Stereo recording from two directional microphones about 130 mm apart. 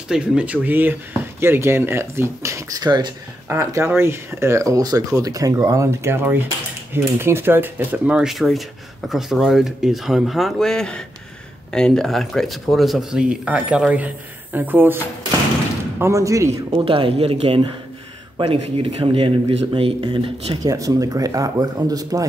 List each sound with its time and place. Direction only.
0.1 s speech: 5° right (ahead or behind); by 3.1 s 30° right (ahead or behind)
3.4 s speech: 20° right (ahead or behind)
16.0 s speech: 25° right (ahead or behind)
16.7 s speech: 45° right (ahead or behind)
20.6 s speech: 25° right (ahead or behind)